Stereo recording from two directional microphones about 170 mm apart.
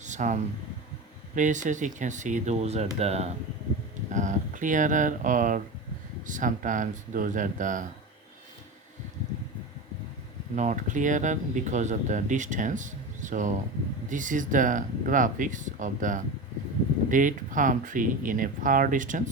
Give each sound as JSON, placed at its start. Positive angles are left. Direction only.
{"t": 0.0, "sound": "a sound", "side_deg": -45}
{"t": 1.4, "sound": "speech", "side_deg": -45}
{"t": 10.5, "sound": "speech", "side_deg": -45}